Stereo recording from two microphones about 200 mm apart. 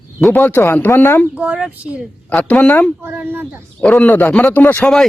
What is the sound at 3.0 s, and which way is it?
Speech, 10° right (ahead or behind).